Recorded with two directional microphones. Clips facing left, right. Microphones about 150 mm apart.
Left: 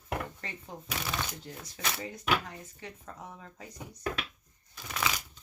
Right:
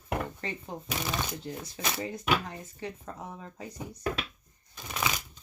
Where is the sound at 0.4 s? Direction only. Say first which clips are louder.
Right 6 dB; 25° right (ahead or behind).